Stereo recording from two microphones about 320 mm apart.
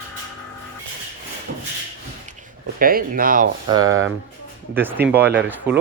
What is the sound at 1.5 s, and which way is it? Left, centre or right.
Rub, right.